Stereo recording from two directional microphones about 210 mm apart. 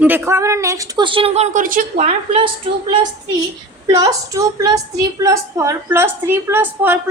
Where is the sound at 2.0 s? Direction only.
25° right (ahead or behind).